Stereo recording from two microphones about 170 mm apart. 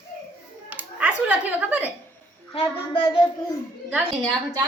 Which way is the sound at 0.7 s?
10° right (ahead or behind).